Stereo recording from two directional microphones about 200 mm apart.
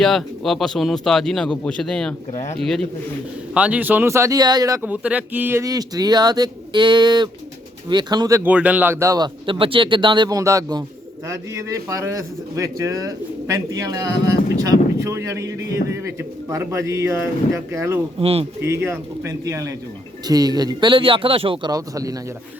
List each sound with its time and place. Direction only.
0.0 s speech: centre (ahead or behind)
2.3 s speech: 35° left (ahead or behind)
2.6 s speech: centre (ahead or behind); by 18.0 s 15° right (ahead or behind)
18.2 s speech: 30° right (ahead or behind)
18.6 s speech: 10° right (ahead or behind)